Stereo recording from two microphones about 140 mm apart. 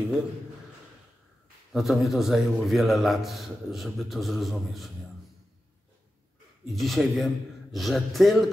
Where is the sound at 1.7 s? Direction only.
Centre (ahead or behind).